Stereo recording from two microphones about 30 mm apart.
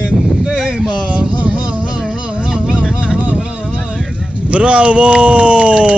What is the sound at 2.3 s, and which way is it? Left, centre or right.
Insect, right.